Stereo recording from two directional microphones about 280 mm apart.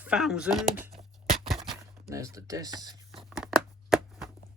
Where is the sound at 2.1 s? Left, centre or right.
Centre.